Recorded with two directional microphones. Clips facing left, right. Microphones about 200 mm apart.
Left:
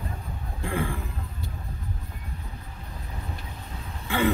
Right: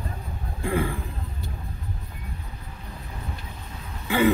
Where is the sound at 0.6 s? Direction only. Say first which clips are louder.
Right 4 dB; 10° right (ahead or behind).